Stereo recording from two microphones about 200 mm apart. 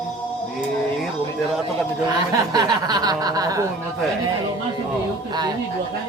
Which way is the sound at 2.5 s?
20° right (ahead or behind).